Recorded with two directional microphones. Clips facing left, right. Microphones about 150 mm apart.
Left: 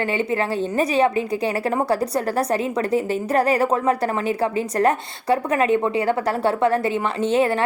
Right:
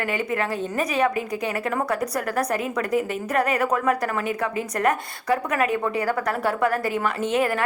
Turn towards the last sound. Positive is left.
turn(degrees=30)  # may be behind; listen again after turning